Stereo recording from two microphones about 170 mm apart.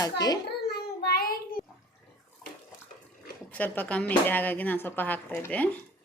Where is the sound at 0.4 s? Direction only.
70° left (ahead or behind).